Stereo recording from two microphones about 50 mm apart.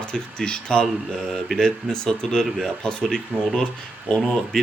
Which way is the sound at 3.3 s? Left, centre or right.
Left.